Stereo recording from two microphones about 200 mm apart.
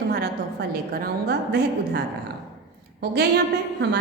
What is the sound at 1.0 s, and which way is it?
A woman's voice, 55° right (ahead or behind).